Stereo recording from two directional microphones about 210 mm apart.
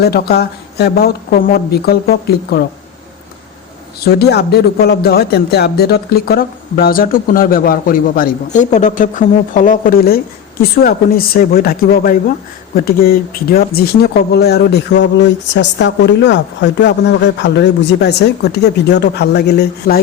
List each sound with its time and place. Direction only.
0.0 s speech: 50° left (ahead or behind)
4.0 s speech: 50° left (ahead or behind)